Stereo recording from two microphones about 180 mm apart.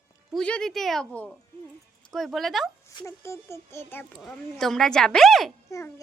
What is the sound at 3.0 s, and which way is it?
A child's voice, 15° left (ahead or behind).